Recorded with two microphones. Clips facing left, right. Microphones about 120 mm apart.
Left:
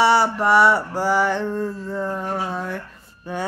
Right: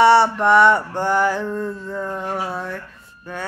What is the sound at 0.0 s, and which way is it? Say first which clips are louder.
Mantra: right 4 dB; centre (ahead or behind).